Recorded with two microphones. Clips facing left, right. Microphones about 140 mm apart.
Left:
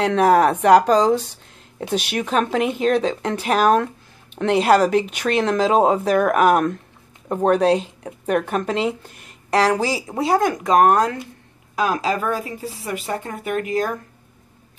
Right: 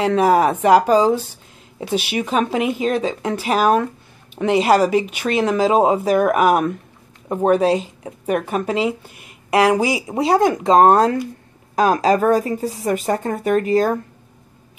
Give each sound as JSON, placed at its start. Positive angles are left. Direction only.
{"t": 0.0, "sound": "speech", "side_deg": -5}